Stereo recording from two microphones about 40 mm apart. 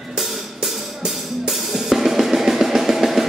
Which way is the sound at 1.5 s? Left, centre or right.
Centre.